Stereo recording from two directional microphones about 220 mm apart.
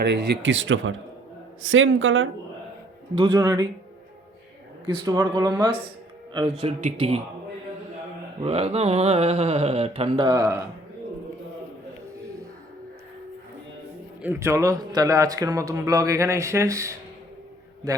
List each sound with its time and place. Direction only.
0.0 s speech: 50° right (ahead or behind)
3.2 s speech: 20° right (ahead or behind)
4.9 s speech: 20° right (ahead or behind)
8.4 s speech: 25° right (ahead or behind)
10.2 s speech: 15° right (ahead or behind)
14.2 s speech: 10° right (ahead or behind)